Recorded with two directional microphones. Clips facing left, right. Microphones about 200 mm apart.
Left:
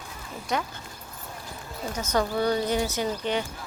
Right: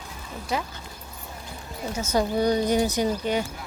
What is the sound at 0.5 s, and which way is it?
Speech, 5° right (ahead or behind).